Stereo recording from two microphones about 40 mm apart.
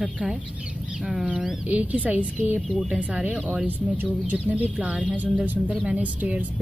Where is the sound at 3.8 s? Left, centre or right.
Centre.